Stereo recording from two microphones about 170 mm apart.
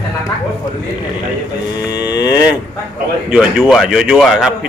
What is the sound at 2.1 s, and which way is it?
Cattle, 25° left (ahead or behind).